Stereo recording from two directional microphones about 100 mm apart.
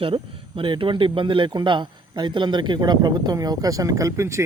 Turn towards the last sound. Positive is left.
turn(degrees=-30)  # may be behind; listen again after turning